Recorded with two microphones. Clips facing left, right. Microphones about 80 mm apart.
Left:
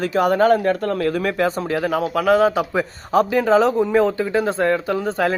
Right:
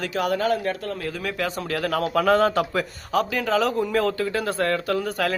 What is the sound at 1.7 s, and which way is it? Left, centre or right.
Speech, centre.